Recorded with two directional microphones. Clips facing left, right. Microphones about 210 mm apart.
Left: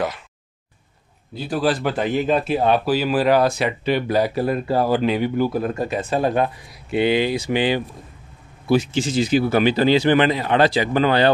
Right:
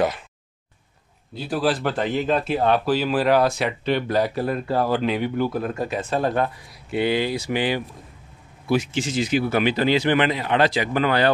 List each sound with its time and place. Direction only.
1.3 s speech: centre (ahead or behind); by 11.2 s 30° left (ahead or behind)